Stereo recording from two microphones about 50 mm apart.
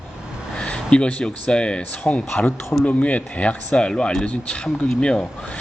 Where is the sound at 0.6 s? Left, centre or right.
Centre.